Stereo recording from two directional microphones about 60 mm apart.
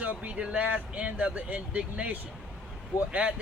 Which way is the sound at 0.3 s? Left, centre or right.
Centre.